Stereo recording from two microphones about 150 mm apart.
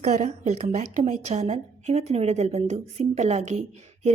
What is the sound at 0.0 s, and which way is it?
A woman's voice, 50° right (ahead or behind).